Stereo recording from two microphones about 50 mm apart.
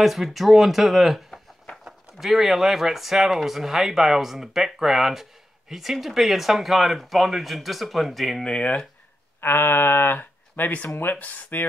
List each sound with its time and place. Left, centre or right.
0.0 s speech: centre
8.5 s speech: left
9.4 s speech: left